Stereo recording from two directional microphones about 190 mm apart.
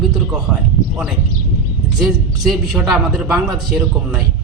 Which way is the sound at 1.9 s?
Centre (ahead or behind).